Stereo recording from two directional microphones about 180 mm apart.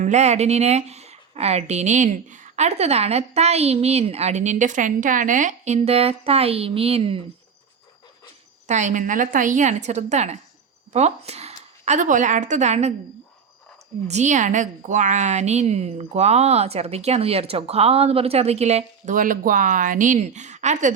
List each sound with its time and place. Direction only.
0.0 s a woman's voice: 40° right (ahead or behind)
8.6 s a woman's voice: 40° right (ahead or behind)
14.1 s a woman's voice: 40° right (ahead or behind)